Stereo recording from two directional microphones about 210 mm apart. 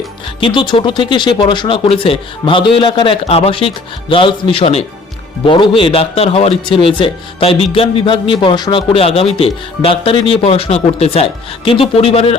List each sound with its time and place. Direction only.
0.3 s a man's voice: 25° left (ahead or behind)